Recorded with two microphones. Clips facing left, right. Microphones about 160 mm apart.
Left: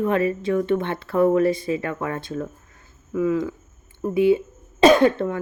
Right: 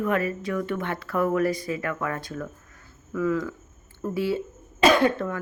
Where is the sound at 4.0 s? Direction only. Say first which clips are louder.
Left 8 dB; 20° left (ahead or behind).